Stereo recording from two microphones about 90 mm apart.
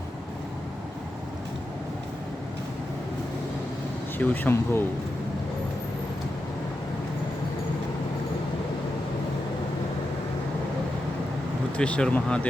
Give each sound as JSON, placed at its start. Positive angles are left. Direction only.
{"t": 4.2, "sound": "speech", "side_deg": 20}
{"t": 11.8, "sound": "speech", "side_deg": 10}